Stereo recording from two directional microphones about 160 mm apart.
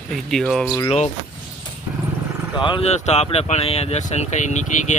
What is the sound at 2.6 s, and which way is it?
Speech, 30° left (ahead or behind).